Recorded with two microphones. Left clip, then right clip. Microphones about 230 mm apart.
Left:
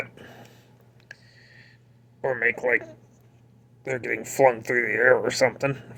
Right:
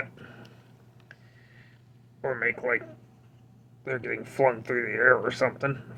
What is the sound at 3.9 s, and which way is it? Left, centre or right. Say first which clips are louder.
Speech: left 4 dB; centre.